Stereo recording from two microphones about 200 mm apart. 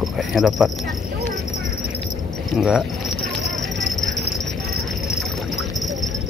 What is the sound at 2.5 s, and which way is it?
Speech, centre (ahead or behind).